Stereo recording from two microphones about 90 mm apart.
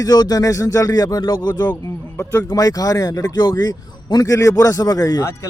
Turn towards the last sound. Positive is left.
turn(degrees=40)  # may be behind; listen again after turning